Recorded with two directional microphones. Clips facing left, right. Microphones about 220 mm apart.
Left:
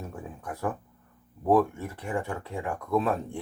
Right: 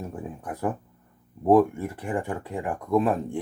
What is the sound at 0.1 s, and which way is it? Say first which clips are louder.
Speech: right 4 dB; 15° right (ahead or behind).